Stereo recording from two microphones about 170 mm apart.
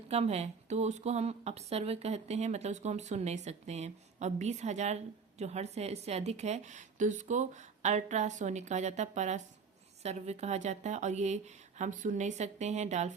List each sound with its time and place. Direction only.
0.1 s a woman's voice: 40° right (ahead or behind)